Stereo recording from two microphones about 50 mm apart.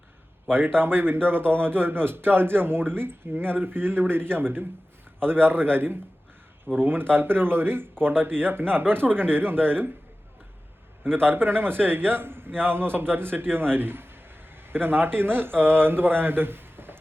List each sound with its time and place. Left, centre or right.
0.8 s a man's voice: right
11.0 s a man's voice: right